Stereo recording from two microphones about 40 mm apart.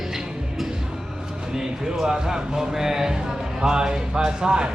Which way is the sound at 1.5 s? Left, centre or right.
Centre.